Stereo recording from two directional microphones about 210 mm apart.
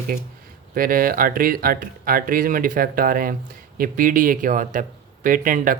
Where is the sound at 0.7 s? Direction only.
40° right (ahead or behind).